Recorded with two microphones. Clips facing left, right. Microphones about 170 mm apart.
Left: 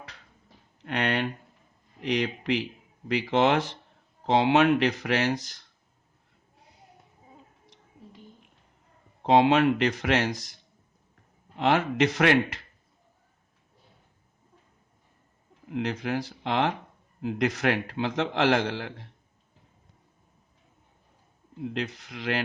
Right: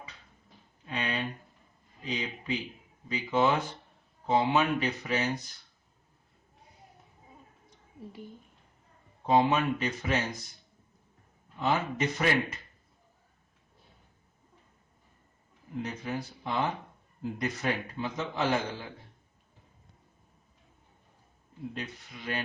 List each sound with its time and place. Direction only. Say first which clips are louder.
0.8 s a sound: left 6 dB; 75° left (ahead or behind)
2.0 s a man's voice: left 8 dB; 80° left
9.2 s a man's voice: left 5 dB; 75° left (ahead or behind)
15.7 s a man's voice: left 6 dB; 80° left
21.6 s a man's voice: left 7 dB; 80° left